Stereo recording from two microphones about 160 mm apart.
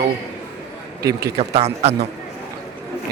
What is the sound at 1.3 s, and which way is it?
Speech, 40° right (ahead or behind).